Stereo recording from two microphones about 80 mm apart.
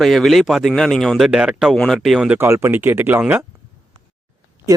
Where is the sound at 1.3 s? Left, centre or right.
Centre.